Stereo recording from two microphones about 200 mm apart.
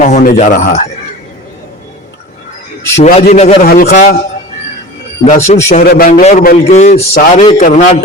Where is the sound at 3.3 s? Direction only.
35° left (ahead or behind).